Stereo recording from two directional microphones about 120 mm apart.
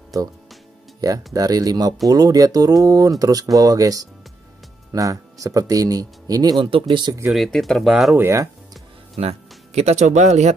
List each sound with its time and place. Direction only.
1.0 s speech: 30° right (ahead or behind)
7.2 s speech: centre (ahead or behind)
8.2 s speech: 25° right (ahead or behind)
9.8 s speech: 75° right (ahead or behind)